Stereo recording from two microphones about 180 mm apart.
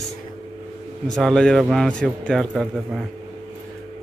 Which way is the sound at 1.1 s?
5° left (ahead or behind).